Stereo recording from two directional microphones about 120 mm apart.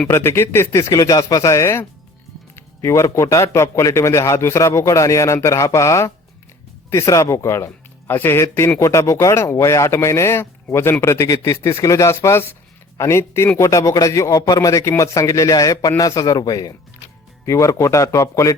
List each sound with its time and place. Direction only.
0.1 s a man's voice: 20° left (ahead or behind)